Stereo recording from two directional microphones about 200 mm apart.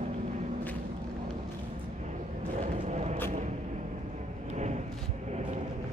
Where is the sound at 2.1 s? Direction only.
35° right (ahead or behind).